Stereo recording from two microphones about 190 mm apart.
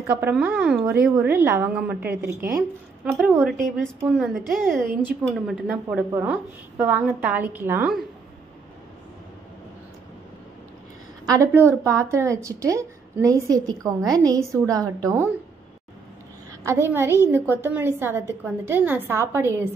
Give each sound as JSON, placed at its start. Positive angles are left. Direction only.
{"t": 0.0, "sound": "a woman's voice", "side_deg": -10}
{"t": 3.1, "sound": "a woman's voice", "side_deg": -5}
{"t": 11.2, "sound": "a woman's voice", "side_deg": -15}
{"t": 16.6, "sound": "a woman's voice", "side_deg": -15}